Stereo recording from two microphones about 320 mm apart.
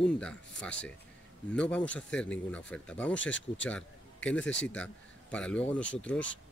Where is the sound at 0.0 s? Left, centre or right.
Centre.